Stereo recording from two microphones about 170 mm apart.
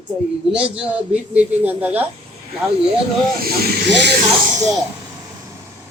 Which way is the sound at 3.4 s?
75° right (ahead or behind).